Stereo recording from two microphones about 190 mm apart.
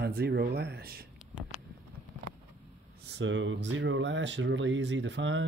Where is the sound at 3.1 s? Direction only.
75° right (ahead or behind).